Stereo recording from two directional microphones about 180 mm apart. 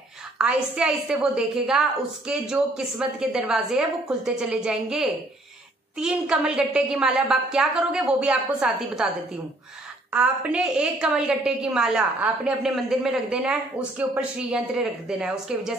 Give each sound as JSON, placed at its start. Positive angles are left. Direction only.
{"t": 0.4, "sound": "a woman's voice", "side_deg": -5}
{"t": 10.1, "sound": "a woman's voice", "side_deg": -5}